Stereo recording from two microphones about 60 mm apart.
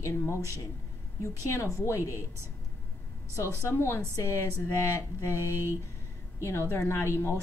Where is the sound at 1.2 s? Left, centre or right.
Left.